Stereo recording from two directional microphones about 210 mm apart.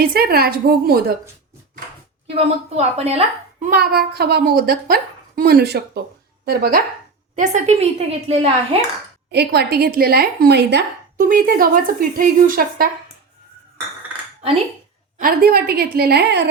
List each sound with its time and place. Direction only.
0.0 s a woman's voice: 45° right (ahead or behind)
2.3 s a woman's voice: 30° right (ahead or behind)
3.7 s a woman's voice: 45° right (ahead or behind); by 8.8 s 25° right (ahead or behind)
9.3 s a woman's voice: 50° right (ahead or behind)
15.2 s a woman's voice: 45° right (ahead or behind)